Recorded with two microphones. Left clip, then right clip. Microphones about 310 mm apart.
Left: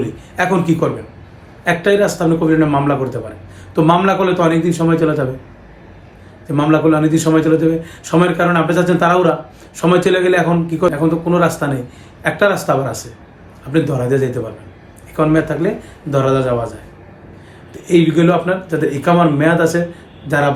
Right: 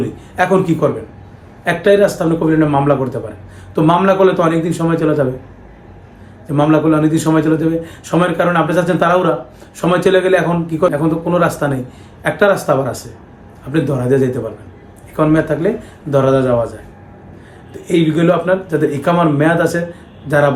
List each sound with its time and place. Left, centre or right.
0.3 s a man's voice: centre
6.5 s a man's voice: centre
17.8 s a man's voice: centre